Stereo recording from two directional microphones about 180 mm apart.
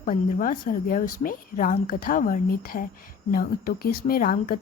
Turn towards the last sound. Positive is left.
turn(degrees=50)  # may be behind; listen again after turning